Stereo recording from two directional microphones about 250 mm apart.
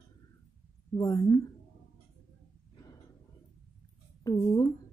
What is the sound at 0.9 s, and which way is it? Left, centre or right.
Speech, centre.